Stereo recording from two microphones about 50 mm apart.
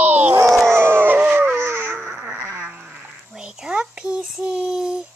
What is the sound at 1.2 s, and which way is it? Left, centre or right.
Dog, right.